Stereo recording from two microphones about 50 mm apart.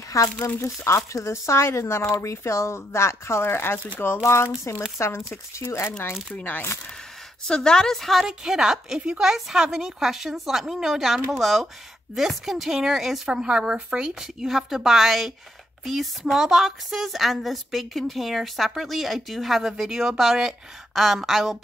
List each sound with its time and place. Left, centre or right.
0.1 s a woman's voice: left
4.2 s a woman's voice: left
5.9 s speech: left
6.3 s speech: left
7.4 s a woman's voice: centre
8.3 s a woman's voice: centre
14.2 s a woman's voice: centre